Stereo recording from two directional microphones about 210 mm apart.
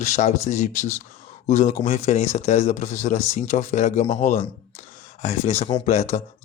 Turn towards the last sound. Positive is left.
turn(degrees=30)  # may be behind; listen again after turning